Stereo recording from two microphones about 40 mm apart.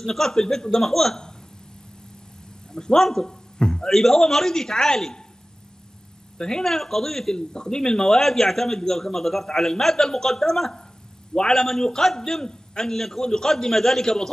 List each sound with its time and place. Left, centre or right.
0.0 s speech: centre
2.7 s a man's voice: centre
3.8 s speech: centre
6.3 s speech: centre